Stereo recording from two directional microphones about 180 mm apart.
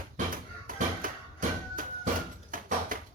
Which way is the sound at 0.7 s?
50° right (ahead or behind).